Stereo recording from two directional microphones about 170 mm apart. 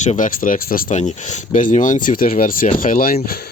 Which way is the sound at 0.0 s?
45° left (ahead or behind).